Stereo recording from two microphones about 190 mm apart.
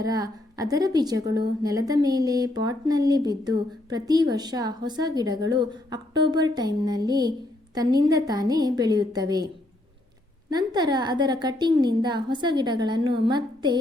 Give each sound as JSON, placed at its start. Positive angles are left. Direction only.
{"t": 0.0, "sound": "a woman's voice", "side_deg": -20}
{"t": 10.5, "sound": "a woman's voice", "side_deg": -20}